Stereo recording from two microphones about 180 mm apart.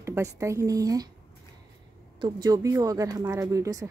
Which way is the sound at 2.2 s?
20° right (ahead or behind).